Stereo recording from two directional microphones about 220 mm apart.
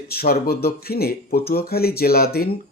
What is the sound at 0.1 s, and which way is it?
Speech, 45° left (ahead or behind).